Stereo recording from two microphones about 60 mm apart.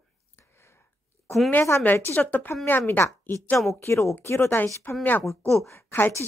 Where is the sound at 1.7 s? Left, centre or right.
Left.